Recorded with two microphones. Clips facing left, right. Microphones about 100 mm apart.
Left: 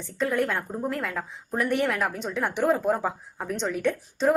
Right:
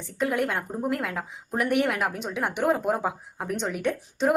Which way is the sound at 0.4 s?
15° right (ahead or behind).